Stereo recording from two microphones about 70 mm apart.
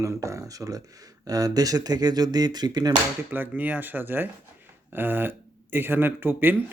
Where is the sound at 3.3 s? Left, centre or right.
Right.